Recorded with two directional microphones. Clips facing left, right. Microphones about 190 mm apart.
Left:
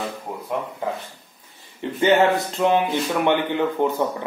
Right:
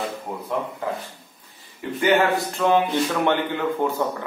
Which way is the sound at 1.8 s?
25° left (ahead or behind).